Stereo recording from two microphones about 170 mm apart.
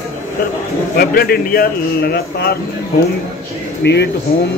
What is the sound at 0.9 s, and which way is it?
A man's voice, 65° left (ahead or behind).